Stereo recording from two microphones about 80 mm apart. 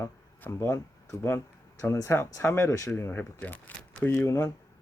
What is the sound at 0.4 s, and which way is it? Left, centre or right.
Speech, left.